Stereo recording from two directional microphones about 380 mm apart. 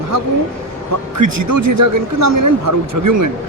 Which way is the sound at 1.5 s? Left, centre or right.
Right.